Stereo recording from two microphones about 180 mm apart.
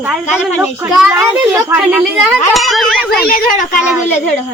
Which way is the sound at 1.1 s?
15° right (ahead or behind).